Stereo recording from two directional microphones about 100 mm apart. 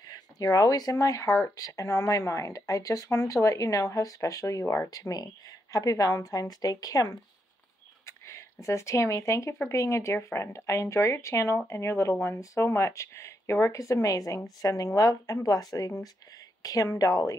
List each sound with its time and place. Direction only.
0.0 s a woman's voice: 40° left (ahead or behind)